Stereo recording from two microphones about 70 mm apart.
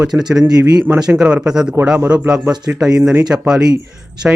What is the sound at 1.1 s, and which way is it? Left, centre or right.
Speech, centre.